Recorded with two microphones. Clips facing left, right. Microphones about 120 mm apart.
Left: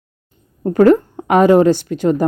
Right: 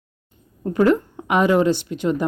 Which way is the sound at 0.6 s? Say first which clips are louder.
Left 6 dB; 45° left (ahead or behind).